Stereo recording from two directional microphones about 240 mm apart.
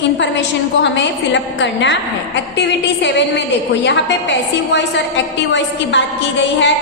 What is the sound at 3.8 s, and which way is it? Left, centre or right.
Speech, left.